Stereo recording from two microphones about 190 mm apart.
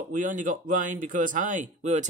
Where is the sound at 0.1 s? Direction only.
45° right (ahead or behind).